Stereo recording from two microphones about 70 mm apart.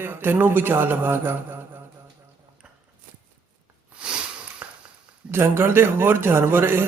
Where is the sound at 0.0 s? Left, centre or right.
Right.